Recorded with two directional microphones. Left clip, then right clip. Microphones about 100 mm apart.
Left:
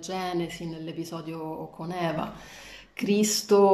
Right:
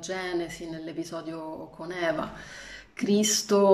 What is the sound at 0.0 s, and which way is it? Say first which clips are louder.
Speech: left 1 dB; 20° left (ahead or behind).